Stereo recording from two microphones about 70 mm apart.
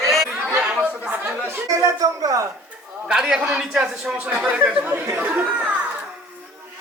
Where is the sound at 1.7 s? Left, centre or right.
Right.